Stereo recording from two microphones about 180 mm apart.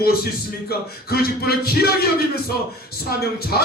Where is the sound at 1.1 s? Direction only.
60° left (ahead or behind).